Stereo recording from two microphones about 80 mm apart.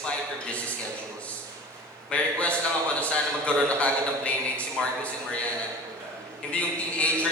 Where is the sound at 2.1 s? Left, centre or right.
Centre.